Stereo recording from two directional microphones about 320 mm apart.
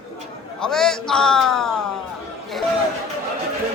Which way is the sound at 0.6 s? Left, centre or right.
Centre.